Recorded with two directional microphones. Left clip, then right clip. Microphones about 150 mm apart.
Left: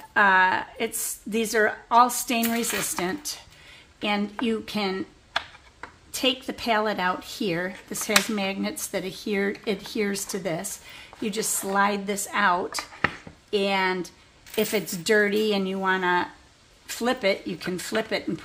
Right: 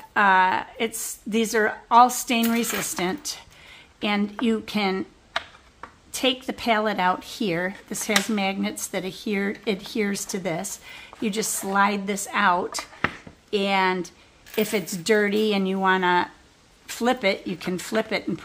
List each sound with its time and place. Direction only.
0.1 s speech: 20° right (ahead or behind)
6.1 s speech: 25° right (ahead or behind)